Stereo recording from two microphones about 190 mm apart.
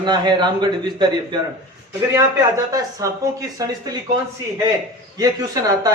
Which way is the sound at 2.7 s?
20° right (ahead or behind).